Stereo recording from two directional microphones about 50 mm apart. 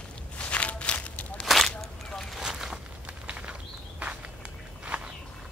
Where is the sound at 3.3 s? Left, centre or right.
Right.